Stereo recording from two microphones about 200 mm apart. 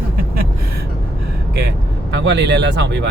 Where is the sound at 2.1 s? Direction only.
60° right (ahead or behind).